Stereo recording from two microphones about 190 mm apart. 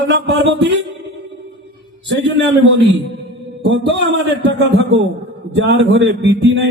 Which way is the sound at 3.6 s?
70° right (ahead or behind).